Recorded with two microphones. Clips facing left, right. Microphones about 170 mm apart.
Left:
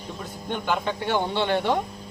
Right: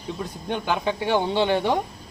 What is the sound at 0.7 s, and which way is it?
A man's voice, 15° right (ahead or behind).